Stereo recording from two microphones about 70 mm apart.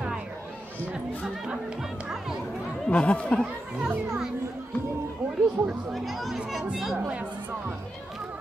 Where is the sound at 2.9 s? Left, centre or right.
Centre.